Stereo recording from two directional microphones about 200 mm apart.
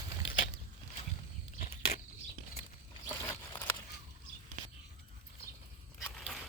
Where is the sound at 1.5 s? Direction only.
40° left (ahead or behind).